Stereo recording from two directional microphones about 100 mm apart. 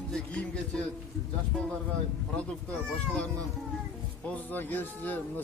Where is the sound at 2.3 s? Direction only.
10° left (ahead or behind).